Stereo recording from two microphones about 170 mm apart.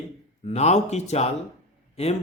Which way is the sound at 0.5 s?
40° left (ahead or behind).